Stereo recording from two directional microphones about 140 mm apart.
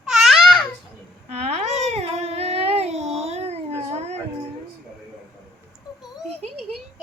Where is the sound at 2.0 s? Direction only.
50° right (ahead or behind).